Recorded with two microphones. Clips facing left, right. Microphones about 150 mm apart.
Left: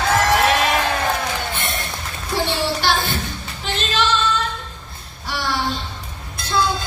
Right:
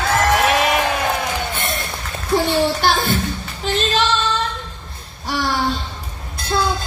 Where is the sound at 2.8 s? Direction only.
45° right (ahead or behind).